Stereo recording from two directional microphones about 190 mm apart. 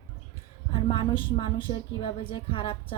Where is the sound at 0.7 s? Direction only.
25° left (ahead or behind).